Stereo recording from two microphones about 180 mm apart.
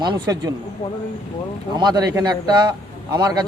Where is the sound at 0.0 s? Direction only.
20° right (ahead or behind).